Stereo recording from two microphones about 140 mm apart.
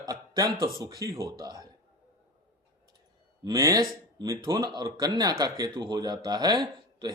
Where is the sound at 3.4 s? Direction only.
25° right (ahead or behind).